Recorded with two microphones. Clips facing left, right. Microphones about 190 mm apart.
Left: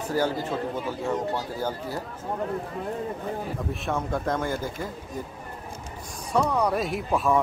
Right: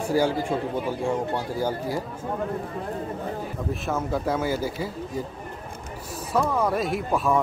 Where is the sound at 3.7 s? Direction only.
5° right (ahead or behind).